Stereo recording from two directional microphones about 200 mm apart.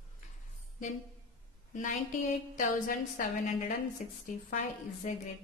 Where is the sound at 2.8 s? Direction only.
40° left (ahead or behind).